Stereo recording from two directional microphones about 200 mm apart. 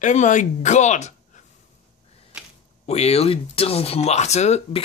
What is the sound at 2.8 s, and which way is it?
Speech, 30° left (ahead or behind).